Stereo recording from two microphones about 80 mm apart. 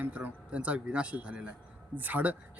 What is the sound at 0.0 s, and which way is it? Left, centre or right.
Speech, centre.